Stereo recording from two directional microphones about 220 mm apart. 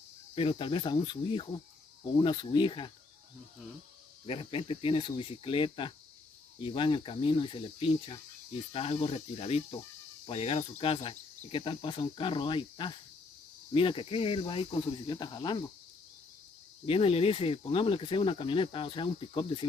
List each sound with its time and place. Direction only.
0.3 s cricket: 25° left (ahead or behind)
4.3 s cricket: 25° left (ahead or behind)
16.8 s cricket: 25° left (ahead or behind)